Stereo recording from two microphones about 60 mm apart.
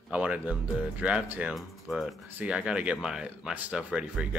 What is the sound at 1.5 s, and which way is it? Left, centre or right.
Speech, centre.